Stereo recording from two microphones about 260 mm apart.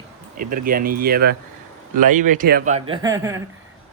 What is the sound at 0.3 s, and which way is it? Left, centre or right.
Speech, right.